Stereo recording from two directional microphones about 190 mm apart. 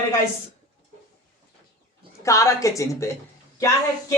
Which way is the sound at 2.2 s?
15° left (ahead or behind).